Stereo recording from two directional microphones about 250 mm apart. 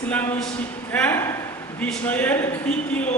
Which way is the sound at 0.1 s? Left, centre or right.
Centre.